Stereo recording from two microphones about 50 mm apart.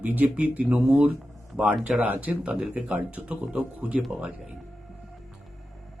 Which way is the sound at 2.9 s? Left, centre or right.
Right.